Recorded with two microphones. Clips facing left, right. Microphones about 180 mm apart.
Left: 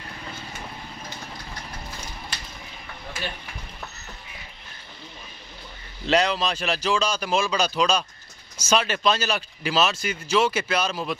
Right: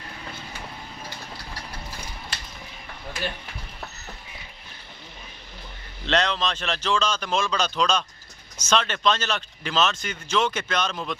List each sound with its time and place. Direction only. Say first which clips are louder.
6.0 s speech: left 2 dB; 10° left (ahead or behind)